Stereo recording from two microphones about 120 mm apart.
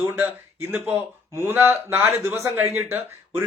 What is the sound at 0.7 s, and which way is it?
Speech, 15° right (ahead or behind).